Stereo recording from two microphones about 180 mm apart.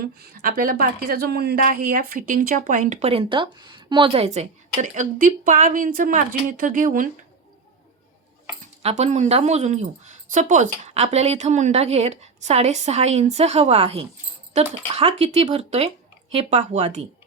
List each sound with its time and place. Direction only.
0.0 s speech: 55° right (ahead or behind)
8.8 s a woman's voice: 35° right (ahead or behind)